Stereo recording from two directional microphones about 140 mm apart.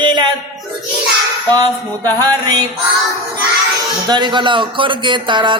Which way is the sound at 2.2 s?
25° right (ahead or behind).